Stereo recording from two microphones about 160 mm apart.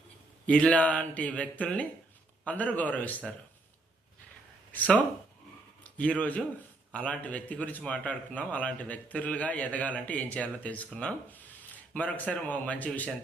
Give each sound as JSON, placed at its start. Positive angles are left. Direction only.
{"t": 0.4, "sound": "a man's voice", "side_deg": 5}
{"t": 4.7, "sound": "speech", "side_deg": 10}
{"t": 6.0, "sound": "a man's voice", "side_deg": 10}